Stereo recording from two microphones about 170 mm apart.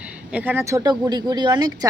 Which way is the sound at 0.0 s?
10° right (ahead or behind).